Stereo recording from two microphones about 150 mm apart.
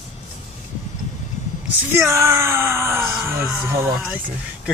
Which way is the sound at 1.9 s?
20° right (ahead or behind).